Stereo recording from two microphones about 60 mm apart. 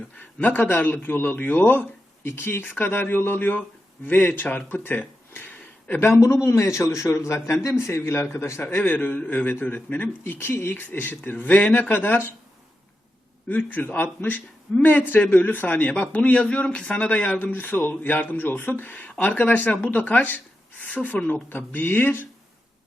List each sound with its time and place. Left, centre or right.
0.2 s a man's voice: left
5.3 s a sound: left
6.0 s a man's voice: left
8.7 s a man's voice: left
13.5 s a man's voice: left